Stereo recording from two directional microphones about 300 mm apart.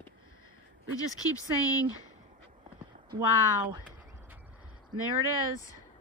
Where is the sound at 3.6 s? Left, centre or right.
Centre.